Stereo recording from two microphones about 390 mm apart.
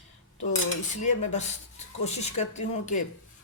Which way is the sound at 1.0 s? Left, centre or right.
Centre.